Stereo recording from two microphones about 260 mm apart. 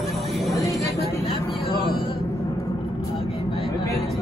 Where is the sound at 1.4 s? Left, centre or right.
Left.